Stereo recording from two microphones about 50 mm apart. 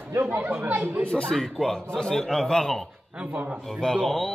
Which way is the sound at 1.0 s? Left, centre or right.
Left.